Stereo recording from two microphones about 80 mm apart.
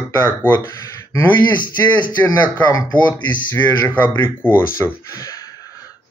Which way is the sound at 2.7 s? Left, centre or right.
Left.